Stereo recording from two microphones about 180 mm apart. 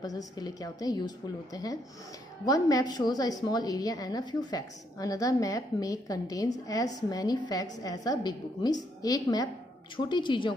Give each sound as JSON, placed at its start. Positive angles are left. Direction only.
{"t": 0.0, "sound": "a woman's voice", "side_deg": 20}